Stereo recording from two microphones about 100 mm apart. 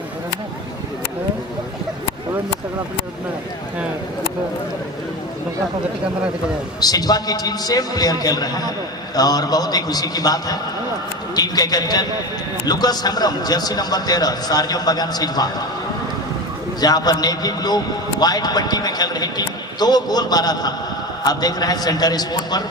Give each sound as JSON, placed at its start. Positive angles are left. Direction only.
{"t": 6.7, "sound": "a man's voice", "side_deg": 40}
{"t": 16.8, "sound": "a man's voice", "side_deg": 40}